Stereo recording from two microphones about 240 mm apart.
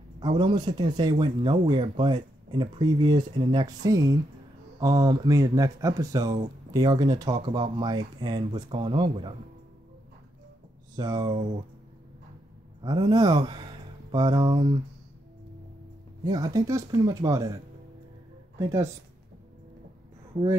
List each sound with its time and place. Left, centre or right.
0.2 s speech: centre
11.0 s speech: centre
12.8 s speech: centre
16.3 s speech: centre
18.6 s speech: centre